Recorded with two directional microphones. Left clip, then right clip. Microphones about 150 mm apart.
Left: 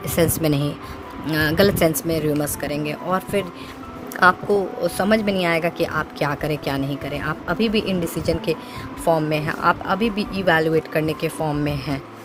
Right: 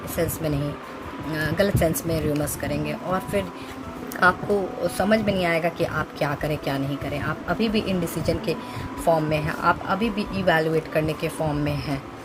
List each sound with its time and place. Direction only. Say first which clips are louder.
0.2 s speech: left 6 dB; 55° left (ahead or behind)